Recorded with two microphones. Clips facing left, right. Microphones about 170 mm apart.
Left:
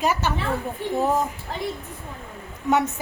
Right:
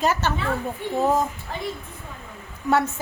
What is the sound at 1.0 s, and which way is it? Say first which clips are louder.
Speech: right 1 dB; 15° right (ahead or behind).